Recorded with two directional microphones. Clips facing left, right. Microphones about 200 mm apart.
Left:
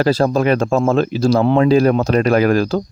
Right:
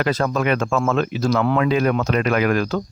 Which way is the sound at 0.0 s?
30° left (ahead or behind).